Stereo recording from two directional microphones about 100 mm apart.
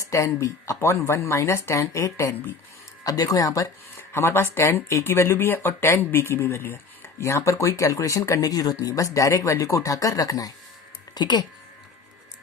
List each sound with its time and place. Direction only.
0.0 s speech: 30° left (ahead or behind)
4.1 s speech: 25° left (ahead or behind); by 11.4 s 45° left (ahead or behind)